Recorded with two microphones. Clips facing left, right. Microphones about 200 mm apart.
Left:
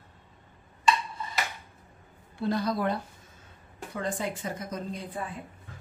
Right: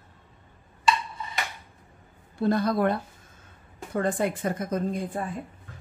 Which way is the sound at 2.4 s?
50° right (ahead or behind).